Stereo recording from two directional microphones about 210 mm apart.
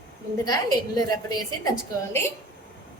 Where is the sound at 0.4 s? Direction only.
15° left (ahead or behind).